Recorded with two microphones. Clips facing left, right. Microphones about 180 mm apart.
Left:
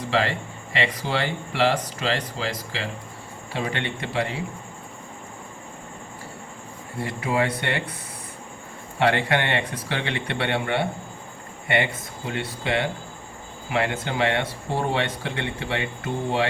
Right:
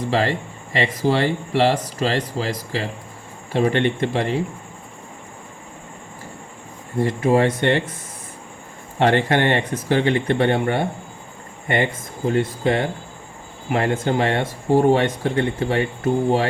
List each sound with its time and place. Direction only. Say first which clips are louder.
0.0 s speech: right 3 dB; 40° right (ahead or behind)
7.0 s speech: right 7 dB; 45° right (ahead or behind)
9.0 s speech: right 4 dB; 45° right (ahead or behind)